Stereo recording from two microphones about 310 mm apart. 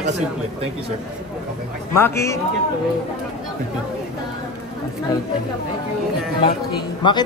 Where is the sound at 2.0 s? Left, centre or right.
Centre.